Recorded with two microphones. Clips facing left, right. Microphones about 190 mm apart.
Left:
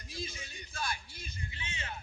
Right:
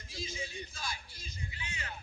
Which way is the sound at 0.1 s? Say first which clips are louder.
Right 2 dB; 55° left (ahead or behind).